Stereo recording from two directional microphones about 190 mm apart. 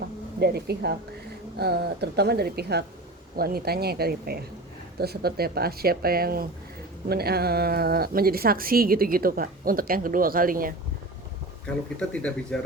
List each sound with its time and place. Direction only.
0.0 s a sound: 60° right (ahead or behind)
1.5 s a woman's voice: 55° right (ahead or behind)
11.6 s speech: 5° left (ahead or behind)